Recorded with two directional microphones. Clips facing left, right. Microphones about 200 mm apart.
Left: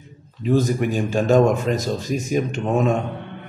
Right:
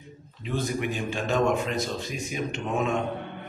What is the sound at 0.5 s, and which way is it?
A man's voice, 40° left (ahead or behind).